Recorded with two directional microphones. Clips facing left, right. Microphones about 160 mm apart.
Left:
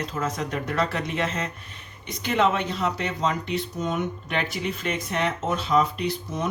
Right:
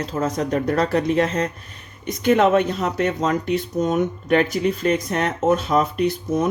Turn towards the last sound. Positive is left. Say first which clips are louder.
# right 8 dB
turn(degrees=-50)  # may be behind; listen again after turning